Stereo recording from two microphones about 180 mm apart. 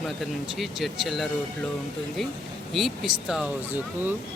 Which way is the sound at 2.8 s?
Centre (ahead or behind).